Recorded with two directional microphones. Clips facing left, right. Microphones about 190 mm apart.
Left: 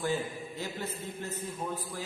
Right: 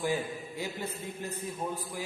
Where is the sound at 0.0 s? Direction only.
10° right (ahead or behind).